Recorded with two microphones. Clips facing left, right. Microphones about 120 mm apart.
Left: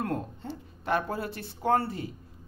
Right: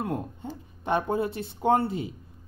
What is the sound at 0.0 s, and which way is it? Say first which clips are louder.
Speech: right 1 dB; 15° right (ahead or behind).